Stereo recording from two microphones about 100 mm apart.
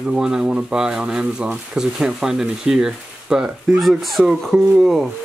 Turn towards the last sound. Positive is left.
turn(degrees=-5)  # may be behind; listen again after turning